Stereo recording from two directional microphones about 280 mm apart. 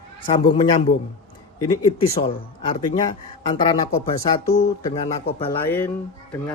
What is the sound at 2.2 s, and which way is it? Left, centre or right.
Speech, centre.